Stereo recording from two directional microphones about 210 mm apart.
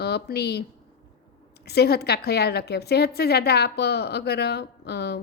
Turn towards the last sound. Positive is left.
turn(degrees=50)  # may be behind; listen again after turning